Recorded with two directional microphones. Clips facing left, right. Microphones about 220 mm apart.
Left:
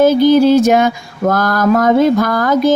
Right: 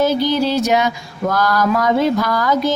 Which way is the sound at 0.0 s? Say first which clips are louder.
Left 8 dB; 50° left (ahead or behind).